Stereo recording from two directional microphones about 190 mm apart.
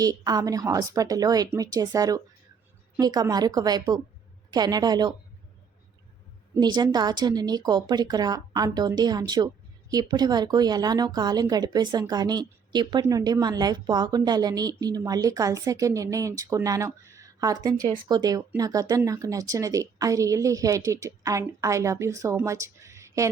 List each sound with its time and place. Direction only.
0.0 s speech: 20° right (ahead or behind)
6.5 s speech: 20° right (ahead or behind)
22.4 s a sound: 15° right (ahead or behind)